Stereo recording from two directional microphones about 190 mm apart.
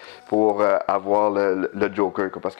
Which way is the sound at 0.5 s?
20° left (ahead or behind).